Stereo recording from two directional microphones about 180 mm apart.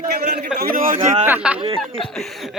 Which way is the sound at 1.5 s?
30° right (ahead or behind).